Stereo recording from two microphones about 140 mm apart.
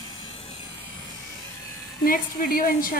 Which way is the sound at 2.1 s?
90° left.